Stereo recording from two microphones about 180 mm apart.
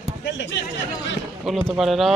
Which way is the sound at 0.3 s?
90° left.